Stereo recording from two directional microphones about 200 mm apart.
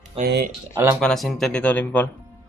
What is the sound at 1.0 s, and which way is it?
Speech, centre (ahead or behind).